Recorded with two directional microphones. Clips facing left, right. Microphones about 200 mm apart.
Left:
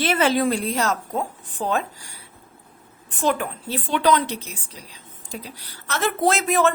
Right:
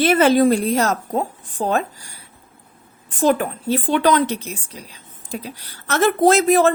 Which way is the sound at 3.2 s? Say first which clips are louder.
Right 5 dB; 40° right (ahead or behind).